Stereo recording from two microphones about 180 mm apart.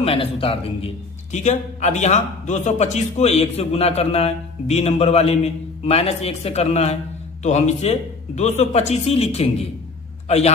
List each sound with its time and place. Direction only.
0.0 s a man's voice: 30° left (ahead or behind)